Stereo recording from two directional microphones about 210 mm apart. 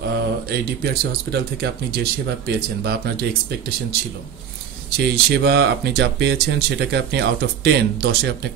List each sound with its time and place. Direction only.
1.3 s speech: 50° right (ahead or behind)
5.0 s speech: 50° right (ahead or behind)